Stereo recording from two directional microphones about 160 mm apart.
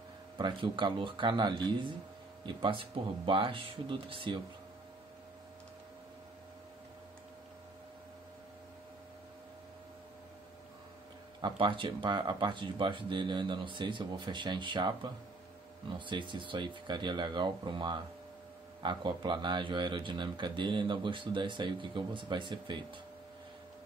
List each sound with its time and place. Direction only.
0.4 s speech: 30° right (ahead or behind)
11.4 s speech: 30° right (ahead or behind)
16.1 s speech: 30° right (ahead or behind)